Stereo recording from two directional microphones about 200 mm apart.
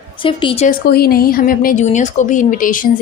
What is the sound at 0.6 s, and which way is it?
Speech, 50° left (ahead or behind).